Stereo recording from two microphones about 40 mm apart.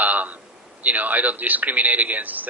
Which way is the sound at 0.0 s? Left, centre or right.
Right.